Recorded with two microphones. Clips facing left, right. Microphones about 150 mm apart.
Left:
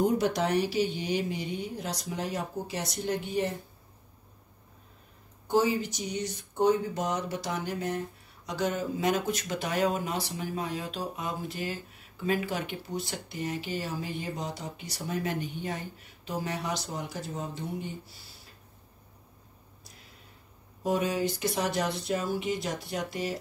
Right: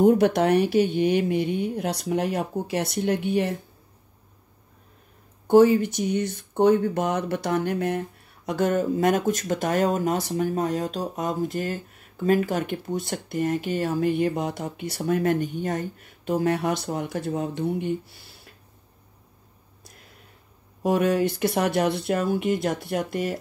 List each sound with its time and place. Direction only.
0.0 s speech: 60° right (ahead or behind)
5.5 s speech: 55° right (ahead or behind)
20.8 s speech: 60° right (ahead or behind)